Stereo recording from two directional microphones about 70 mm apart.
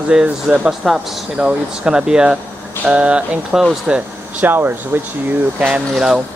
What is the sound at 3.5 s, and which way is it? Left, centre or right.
Speech, centre.